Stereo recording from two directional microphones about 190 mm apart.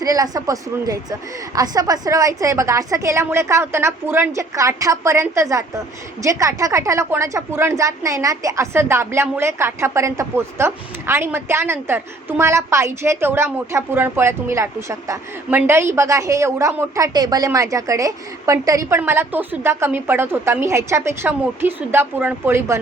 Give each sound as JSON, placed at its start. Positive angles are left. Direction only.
{"t": 0.0, "sound": "a woman's voice", "side_deg": -20}